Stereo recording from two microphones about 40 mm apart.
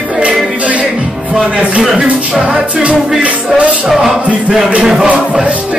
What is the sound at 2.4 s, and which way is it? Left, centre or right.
Music, right.